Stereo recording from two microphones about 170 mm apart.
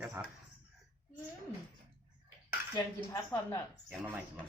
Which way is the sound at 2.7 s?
20° left (ahead or behind).